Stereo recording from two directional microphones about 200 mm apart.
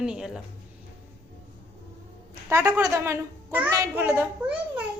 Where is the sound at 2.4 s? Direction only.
15° right (ahead or behind).